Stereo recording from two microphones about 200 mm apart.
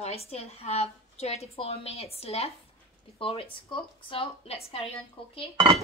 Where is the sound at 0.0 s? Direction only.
30° left (ahead or behind).